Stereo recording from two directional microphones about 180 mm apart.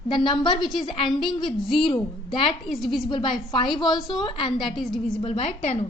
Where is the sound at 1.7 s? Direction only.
30° left (ahead or behind).